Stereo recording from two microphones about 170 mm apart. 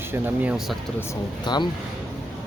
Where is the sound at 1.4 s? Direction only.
25° left (ahead or behind).